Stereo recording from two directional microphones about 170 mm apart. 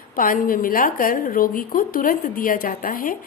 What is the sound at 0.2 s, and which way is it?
A woman's voice, 55° left (ahead or behind).